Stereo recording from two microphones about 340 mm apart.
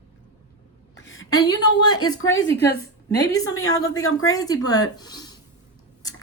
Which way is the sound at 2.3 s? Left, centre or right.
Left.